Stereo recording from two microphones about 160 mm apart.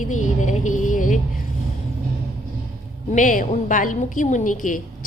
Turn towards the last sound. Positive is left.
turn(degrees=55)  # may be behind; listen again after turning